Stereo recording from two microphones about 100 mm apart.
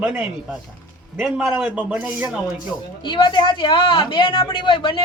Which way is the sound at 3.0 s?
55° left (ahead or behind).